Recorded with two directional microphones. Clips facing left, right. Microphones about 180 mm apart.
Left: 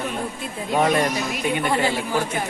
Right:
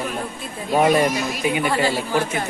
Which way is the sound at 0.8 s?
5° right (ahead or behind).